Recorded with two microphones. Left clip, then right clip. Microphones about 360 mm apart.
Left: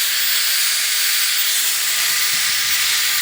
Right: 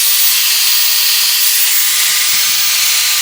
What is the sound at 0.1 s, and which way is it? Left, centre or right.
Steam, centre.